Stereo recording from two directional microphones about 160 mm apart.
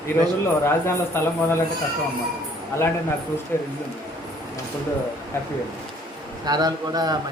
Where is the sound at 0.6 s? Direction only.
15° left (ahead or behind).